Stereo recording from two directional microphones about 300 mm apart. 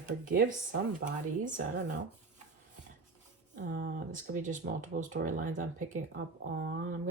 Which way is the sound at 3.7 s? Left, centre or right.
Right.